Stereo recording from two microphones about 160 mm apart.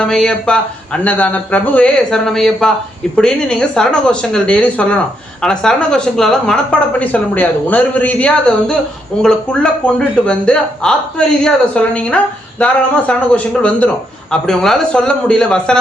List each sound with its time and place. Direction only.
0.0 s speech: 5° left (ahead or behind)